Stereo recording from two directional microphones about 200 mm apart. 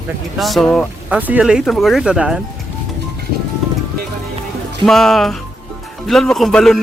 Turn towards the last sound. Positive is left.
turn(degrees=0)  # may be behind; listen again after turning